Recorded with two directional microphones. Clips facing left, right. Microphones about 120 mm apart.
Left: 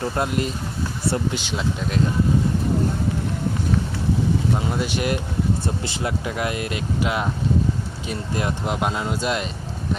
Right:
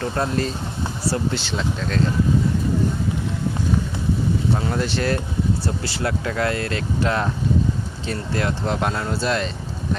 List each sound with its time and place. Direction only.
0.0 s speech: 20° left (ahead or behind)
4.7 s speech: 10° left (ahead or behind)